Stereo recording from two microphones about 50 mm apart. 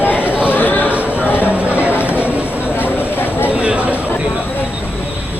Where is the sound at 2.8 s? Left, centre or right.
Left.